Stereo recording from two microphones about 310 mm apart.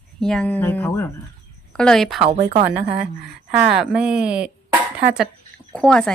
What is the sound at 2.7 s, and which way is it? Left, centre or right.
Speech, centre.